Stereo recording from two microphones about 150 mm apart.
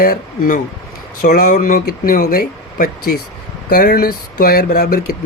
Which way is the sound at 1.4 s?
60° left (ahead or behind).